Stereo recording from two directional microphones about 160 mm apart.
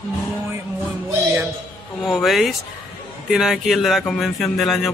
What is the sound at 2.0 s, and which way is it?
A man's voice, centre (ahead or behind).